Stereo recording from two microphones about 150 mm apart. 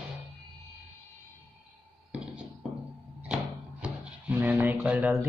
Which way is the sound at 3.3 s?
10° right (ahead or behind).